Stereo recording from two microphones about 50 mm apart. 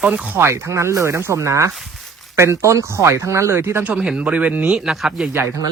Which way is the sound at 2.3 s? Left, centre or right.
Right.